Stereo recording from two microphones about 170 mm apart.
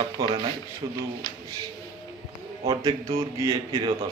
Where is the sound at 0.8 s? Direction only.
20° right (ahead or behind).